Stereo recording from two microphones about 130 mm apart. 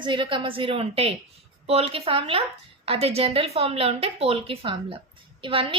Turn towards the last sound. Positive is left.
turn(degrees=-40)  # may be behind; listen again after turning